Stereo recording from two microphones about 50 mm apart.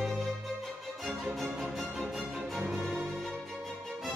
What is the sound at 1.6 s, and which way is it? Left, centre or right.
Music, centre.